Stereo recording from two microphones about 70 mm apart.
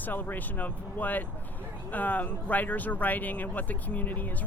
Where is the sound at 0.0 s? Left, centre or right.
Left.